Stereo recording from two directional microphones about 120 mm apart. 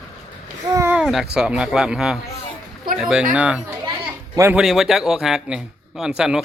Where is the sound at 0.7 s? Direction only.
25° right (ahead or behind).